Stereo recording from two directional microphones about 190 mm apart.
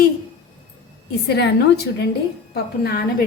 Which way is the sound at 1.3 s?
60° left (ahead or behind).